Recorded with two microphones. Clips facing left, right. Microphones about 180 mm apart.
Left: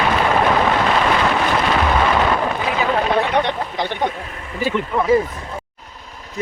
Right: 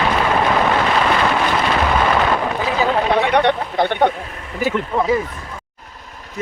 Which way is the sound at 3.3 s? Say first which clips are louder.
Right 3 dB; 65° right (ahead or behind).